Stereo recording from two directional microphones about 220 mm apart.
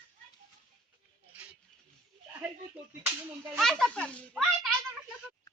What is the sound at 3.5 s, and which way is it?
A woman's voice, centre (ahead or behind).